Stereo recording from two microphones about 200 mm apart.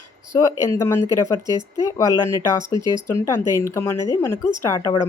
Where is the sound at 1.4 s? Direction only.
20° right (ahead or behind).